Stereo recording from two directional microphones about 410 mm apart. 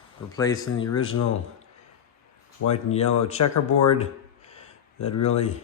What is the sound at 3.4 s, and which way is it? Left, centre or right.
Speech, left.